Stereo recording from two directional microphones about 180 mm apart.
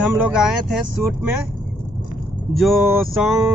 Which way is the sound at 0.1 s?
5° right (ahead or behind).